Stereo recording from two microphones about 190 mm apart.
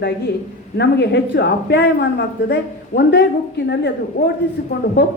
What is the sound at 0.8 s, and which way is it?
Speech, 60° left (ahead or behind).